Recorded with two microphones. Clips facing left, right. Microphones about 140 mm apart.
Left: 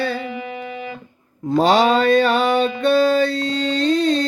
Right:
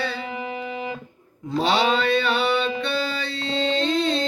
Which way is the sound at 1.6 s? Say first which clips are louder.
Left 6 dB; 45° left (ahead or behind).